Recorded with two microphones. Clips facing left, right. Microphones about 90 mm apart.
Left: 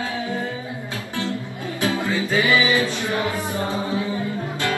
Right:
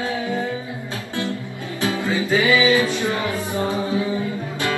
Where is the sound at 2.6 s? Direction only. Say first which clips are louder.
Right 3 dB; 20° right (ahead or behind).